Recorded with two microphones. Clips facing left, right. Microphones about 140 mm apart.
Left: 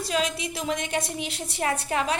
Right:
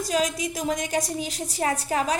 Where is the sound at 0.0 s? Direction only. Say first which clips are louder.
Right 2 dB; 40° right (ahead or behind).